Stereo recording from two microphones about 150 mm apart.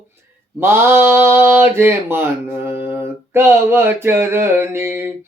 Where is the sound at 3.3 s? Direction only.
15° right (ahead or behind).